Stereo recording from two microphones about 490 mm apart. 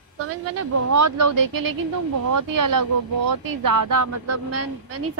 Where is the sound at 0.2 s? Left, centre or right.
Right.